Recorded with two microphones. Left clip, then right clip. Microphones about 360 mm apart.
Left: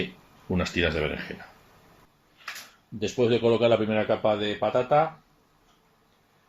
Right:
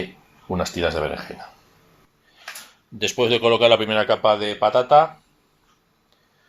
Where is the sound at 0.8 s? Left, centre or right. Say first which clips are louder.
Right 3 dB; right.